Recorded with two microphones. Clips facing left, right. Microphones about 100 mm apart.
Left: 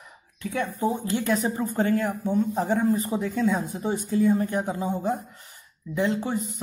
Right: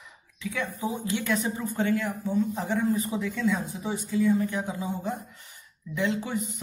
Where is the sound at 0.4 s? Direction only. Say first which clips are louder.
Left 4 dB; 50° left (ahead or behind).